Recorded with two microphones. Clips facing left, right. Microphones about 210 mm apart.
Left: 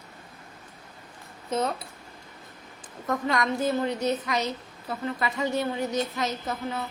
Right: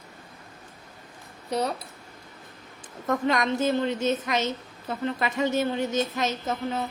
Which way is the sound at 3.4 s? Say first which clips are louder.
Right 2 dB; 25° right (ahead or behind).